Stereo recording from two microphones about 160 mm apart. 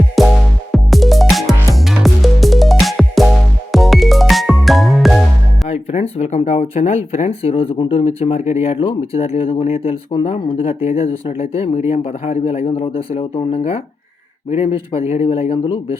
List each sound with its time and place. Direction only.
0.2 s music: centre (ahead or behind)
5.6 s music: 40° left (ahead or behind)
6.1 s speech: 45° left (ahead or behind)